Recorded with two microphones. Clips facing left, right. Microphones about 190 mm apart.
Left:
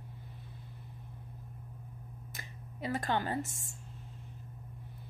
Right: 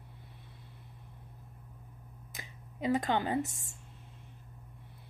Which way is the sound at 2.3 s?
20° right (ahead or behind).